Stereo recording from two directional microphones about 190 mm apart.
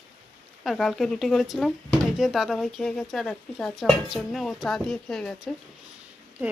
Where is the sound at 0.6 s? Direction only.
Centre (ahead or behind).